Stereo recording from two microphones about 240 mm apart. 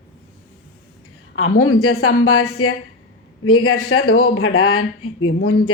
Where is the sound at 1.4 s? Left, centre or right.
Left.